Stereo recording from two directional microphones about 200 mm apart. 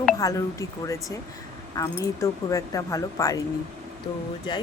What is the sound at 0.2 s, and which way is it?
Speech, 15° left (ahead or behind).